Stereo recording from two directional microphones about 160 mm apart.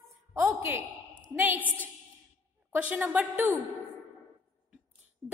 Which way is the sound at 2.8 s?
10° right (ahead or behind).